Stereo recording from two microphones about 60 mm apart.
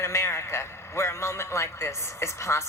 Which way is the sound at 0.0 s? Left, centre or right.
Left.